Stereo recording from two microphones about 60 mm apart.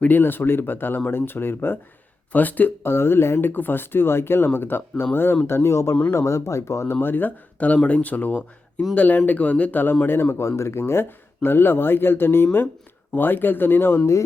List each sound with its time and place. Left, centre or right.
0.2 s speech: left
3.5 s speech: left
6.9 s speech: left
10.1 s speech: left